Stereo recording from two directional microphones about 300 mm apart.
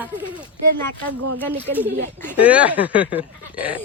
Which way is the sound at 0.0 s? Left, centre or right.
Centre.